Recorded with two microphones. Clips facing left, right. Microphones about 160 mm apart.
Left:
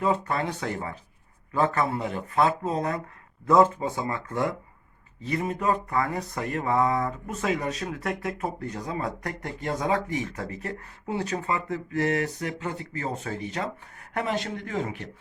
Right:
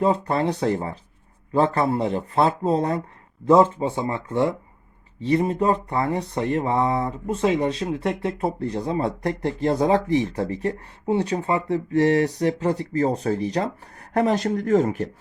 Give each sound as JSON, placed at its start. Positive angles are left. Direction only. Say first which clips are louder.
{"t": 0.0, "sound": "speech", "louder": "right 5 dB", "side_deg": -35}